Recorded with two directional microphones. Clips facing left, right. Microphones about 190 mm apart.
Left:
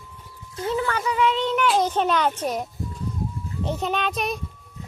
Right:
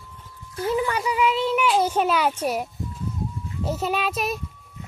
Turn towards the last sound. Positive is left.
turn(degrees=-5)  # may be behind; listen again after turning